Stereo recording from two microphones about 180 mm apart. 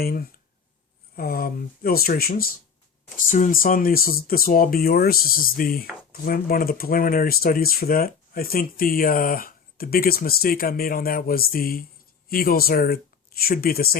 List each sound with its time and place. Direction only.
0.0 s speech: 55° left (ahead or behind)
3.2 s speech: 45° left (ahead or behind)